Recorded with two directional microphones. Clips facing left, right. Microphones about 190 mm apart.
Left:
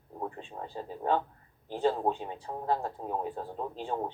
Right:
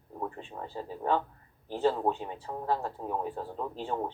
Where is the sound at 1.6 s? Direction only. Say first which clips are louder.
Right 1 dB; 15° left (ahead or behind).